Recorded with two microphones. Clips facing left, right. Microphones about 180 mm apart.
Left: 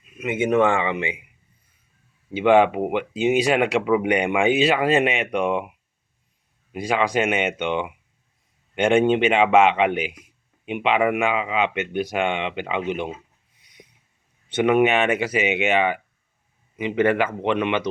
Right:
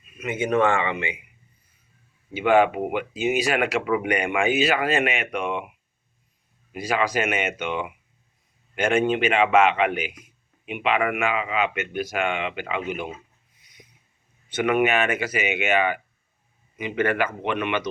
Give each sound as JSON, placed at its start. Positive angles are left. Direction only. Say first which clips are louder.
{"t": 0.2, "sound": "speech", "louder": "left 3 dB", "side_deg": 20}
{"t": 2.3, "sound": "speech", "louder": "left 3 dB", "side_deg": 20}
{"t": 6.7, "sound": "speech", "louder": "left 2 dB", "side_deg": 25}
{"t": 14.6, "sound": "speech", "louder": "left 3 dB", "side_deg": 25}